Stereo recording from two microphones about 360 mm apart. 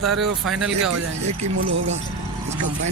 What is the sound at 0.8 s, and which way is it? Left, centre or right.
Speech, right.